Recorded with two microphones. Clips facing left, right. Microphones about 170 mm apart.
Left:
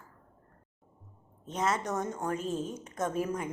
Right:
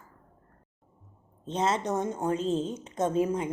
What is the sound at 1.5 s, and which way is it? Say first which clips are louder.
A woman's voice: right 3 dB; 25° right (ahead or behind).